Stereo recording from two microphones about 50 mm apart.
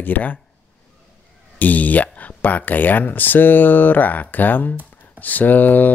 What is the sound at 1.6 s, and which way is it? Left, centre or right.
Speech, left.